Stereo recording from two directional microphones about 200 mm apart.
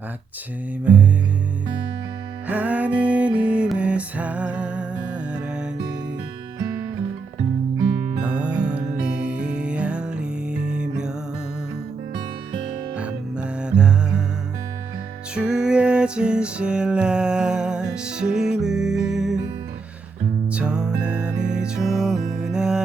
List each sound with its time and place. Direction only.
0.9 s music: 5° right (ahead or behind)
2.5 s music: 10° right (ahead or behind)
8.2 s music: 5° right (ahead or behind)
13.0 s music: 5° right (ahead or behind)
15.4 s music: 5° right (ahead or behind)
20.5 s music: 5° right (ahead or behind)
21.3 s music: 40° right (ahead or behind)
21.6 s music: centre (ahead or behind)